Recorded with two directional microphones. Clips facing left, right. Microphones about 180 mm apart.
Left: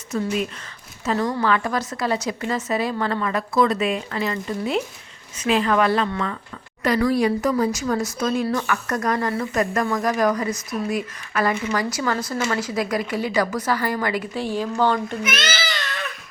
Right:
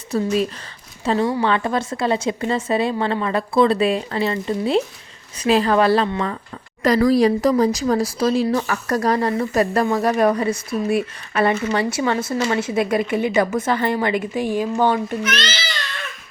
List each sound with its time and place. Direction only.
0.1 s speech: 35° right (ahead or behind); by 15.2 s 15° right (ahead or behind)
15.2 s a child's voice: 10° left (ahead or behind)